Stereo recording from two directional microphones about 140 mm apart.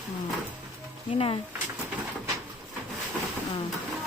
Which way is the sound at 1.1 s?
40° left (ahead or behind).